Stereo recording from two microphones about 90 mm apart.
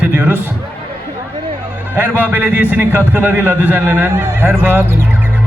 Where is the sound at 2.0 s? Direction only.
20° right (ahead or behind).